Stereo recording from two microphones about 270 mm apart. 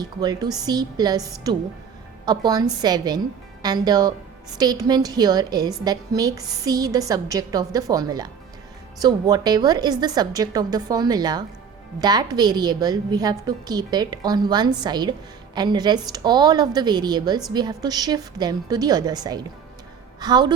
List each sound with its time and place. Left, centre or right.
0.0 s a woman's voice: centre